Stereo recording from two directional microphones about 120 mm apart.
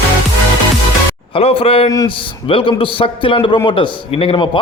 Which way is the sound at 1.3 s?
55° left (ahead or behind).